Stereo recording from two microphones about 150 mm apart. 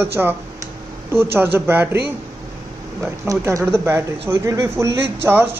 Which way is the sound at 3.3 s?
20° right (ahead or behind).